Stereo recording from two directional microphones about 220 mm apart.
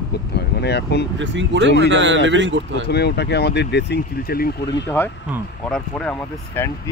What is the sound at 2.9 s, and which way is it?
Speech, 50° left (ahead or behind).